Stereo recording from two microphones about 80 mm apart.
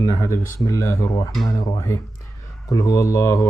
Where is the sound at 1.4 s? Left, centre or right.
Left.